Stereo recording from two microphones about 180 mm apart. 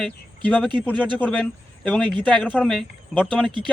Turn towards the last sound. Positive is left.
turn(degrees=5)  # may be behind; listen again after turning